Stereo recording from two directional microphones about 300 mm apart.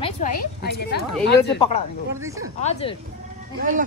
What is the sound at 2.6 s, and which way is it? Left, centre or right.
Speech, left.